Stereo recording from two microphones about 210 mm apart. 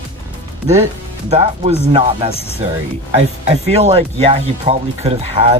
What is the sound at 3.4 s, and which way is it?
Speech, 30° right (ahead or behind).